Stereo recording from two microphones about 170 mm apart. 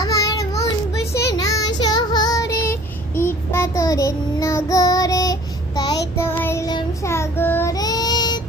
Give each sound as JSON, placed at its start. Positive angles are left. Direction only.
{"t": 0.0, "sound": "child singing", "side_deg": 20}
{"t": 6.1, "sound": "child singing", "side_deg": 15}